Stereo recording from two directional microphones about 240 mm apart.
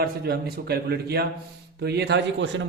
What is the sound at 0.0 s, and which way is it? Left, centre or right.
A man's voice, right.